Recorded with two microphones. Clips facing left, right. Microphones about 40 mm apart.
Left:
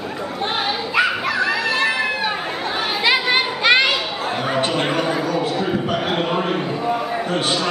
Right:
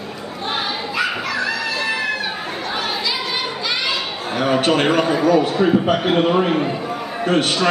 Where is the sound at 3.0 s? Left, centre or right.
Left.